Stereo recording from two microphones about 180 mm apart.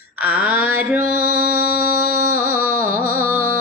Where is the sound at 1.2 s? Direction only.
60° left (ahead or behind).